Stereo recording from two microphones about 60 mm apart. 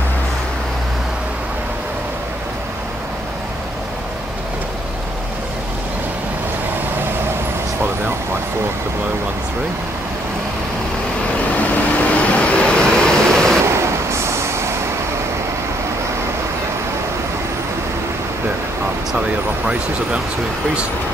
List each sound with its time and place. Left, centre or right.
11.5 s vehicle: left
13.7 s vehicle: right
19.1 s speech: centre